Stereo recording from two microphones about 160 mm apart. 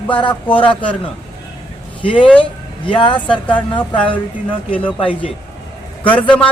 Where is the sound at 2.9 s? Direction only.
30° left (ahead or behind).